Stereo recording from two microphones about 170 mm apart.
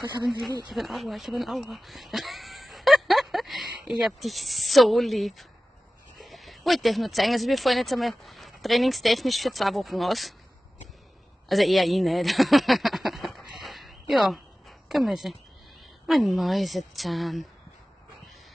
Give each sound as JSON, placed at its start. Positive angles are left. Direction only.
{"t": 0.4, "sound": "speech", "side_deg": 0}
{"t": 11.4, "sound": "a sound", "side_deg": 0}
{"t": 16.1, "sound": "speech", "side_deg": 0}